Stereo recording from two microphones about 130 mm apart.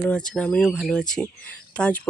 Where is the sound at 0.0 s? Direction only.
5° left (ahead or behind).